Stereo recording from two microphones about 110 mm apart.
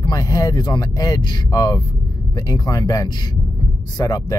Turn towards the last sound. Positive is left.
turn(degrees=35)  # may be behind; listen again after turning